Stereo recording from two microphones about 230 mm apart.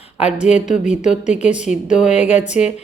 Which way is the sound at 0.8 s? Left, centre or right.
Left.